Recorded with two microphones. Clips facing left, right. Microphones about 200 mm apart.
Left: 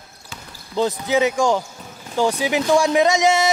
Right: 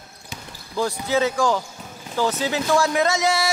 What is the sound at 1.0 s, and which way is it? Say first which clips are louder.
A man's voice: left 1 dB; 15° left (ahead or behind).